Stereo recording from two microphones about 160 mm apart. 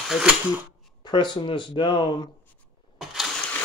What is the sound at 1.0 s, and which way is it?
Speech, 30° left (ahead or behind).